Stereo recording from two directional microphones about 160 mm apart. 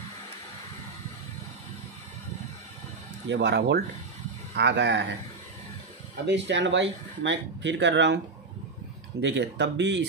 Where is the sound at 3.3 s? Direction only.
90° right.